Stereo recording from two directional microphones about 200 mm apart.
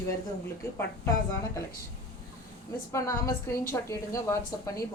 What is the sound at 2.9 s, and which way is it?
A woman's voice, 15° left (ahead or behind).